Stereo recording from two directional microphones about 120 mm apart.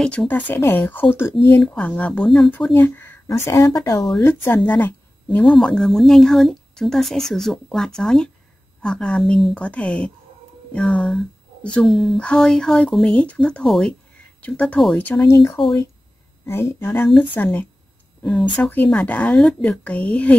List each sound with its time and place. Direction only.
0.0 s speech: 10° left (ahead or behind)
2.7 s speech: 15° left (ahead or behind)
4.2 s speech: 20° left (ahead or behind)
5.5 s speech: 5° left (ahead or behind)